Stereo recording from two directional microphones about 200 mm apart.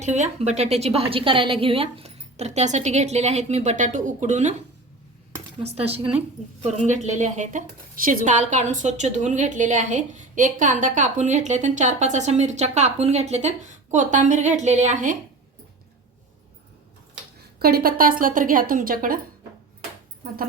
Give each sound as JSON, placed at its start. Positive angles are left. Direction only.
{"t": 0.0, "sound": "speech", "side_deg": -35}
{"t": 5.6, "sound": "speech", "side_deg": -30}
{"t": 17.6, "sound": "a woman's voice", "side_deg": -50}